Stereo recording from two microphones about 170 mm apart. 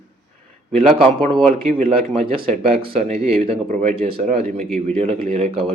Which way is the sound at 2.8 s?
35° right (ahead or behind).